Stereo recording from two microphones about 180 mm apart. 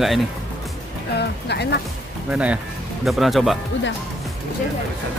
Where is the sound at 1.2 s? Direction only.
65° left (ahead or behind).